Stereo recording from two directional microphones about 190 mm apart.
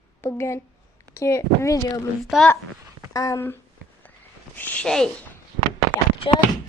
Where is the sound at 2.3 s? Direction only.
Centre (ahead or behind).